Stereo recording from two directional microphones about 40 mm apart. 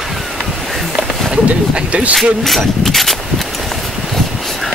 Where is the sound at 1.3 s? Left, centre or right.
Right.